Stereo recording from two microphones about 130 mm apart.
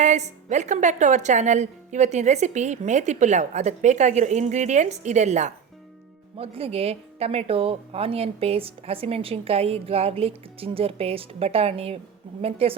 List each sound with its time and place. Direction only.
0.0 s a woman's voice: 65° right (ahead or behind)
6.3 s speech: 45° right (ahead or behind)